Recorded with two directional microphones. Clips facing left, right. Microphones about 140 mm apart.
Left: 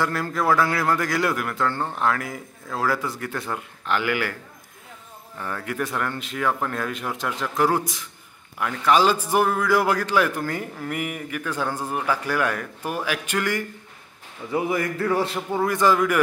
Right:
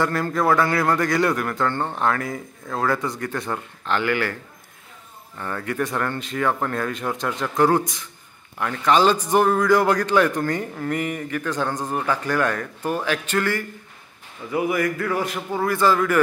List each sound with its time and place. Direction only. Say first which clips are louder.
0.0 s a man's voice: right 3 dB; centre (ahead or behind)
5.4 s a man's voice: right 2 dB; 5° left (ahead or behind)
14.5 s a man's voice: right 2 dB; 25° left (ahead or behind)